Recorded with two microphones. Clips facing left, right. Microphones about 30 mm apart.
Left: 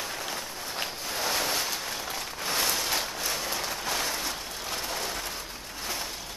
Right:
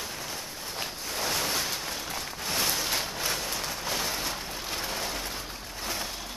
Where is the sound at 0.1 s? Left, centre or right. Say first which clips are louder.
Left 3 dB; centre.